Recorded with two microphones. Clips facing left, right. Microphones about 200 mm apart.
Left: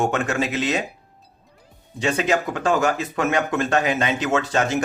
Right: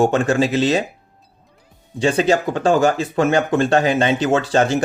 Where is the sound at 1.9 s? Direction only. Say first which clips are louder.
Right 5 dB; 30° right (ahead or behind).